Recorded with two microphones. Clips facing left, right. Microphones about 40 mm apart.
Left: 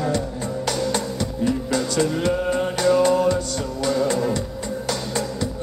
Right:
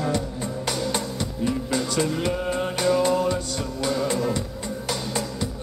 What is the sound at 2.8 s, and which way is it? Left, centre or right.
Music, centre.